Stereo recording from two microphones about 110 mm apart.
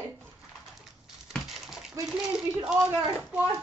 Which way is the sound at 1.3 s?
Centre (ahead or behind).